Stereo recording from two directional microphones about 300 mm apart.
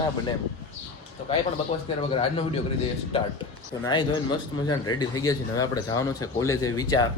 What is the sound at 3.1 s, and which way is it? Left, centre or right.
Speech, centre.